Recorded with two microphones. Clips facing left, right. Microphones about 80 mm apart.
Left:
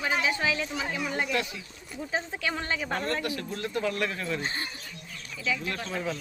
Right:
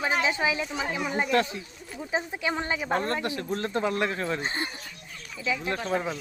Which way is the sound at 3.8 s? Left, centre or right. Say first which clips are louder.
Right 1 dB; right.